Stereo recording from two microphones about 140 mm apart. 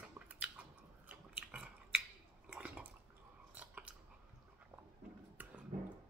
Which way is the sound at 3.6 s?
10° right (ahead or behind).